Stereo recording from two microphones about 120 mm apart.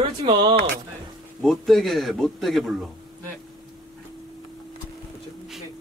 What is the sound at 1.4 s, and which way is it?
Music, centre (ahead or behind).